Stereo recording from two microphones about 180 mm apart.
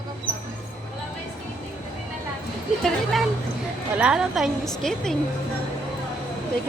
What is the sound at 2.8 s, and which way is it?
A woman's voice, centre (ahead or behind).